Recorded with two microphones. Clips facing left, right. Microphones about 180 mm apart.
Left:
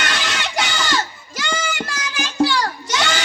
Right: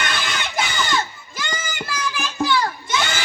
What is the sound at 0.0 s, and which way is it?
Crowd, 85° left.